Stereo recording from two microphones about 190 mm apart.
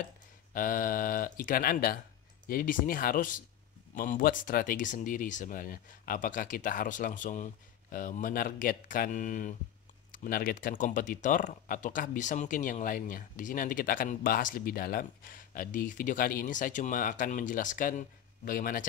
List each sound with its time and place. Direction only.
0.5 s speech: 45° left (ahead or behind)